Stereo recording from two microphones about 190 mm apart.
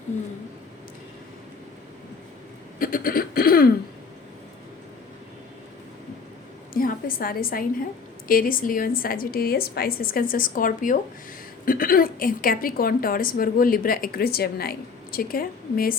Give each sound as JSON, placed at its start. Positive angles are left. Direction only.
{"t": 2.7, "sound": "cough", "side_deg": 50}
{"t": 6.7, "sound": "a woman's voice", "side_deg": 50}